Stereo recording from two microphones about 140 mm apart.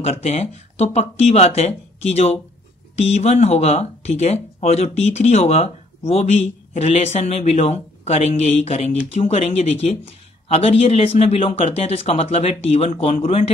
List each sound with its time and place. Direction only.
0.0 s speech: 50° left (ahead or behind)